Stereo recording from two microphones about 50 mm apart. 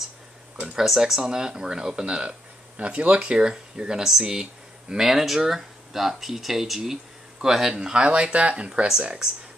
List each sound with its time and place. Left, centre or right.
0.7 s speech: centre
7.8 s speech: centre
9.0 s speech: centre